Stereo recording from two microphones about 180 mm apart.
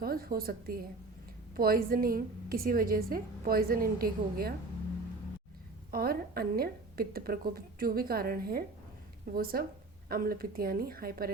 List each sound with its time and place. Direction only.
0.0 s a woman's voice: 55° right (ahead or behind)
5.9 s a woman's voice: 55° right (ahead or behind)